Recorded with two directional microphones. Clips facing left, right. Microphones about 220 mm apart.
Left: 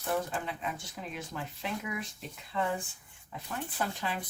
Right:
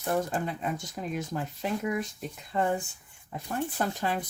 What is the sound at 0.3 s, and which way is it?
Speech, 45° right (ahead or behind).